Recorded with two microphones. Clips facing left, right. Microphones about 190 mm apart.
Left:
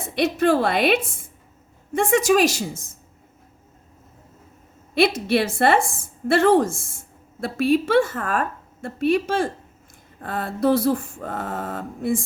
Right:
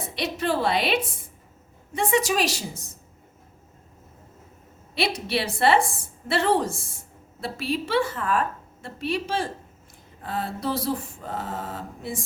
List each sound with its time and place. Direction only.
0.1 s a woman's voice: 50° left (ahead or behind)
4.9 s a woman's voice: 50° left (ahead or behind)